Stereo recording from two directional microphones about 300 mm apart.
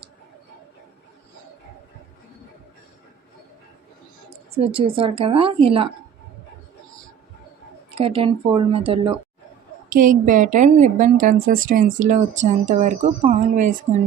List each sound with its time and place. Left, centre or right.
4.5 s a woman's voice: centre
7.9 s a woman's voice: centre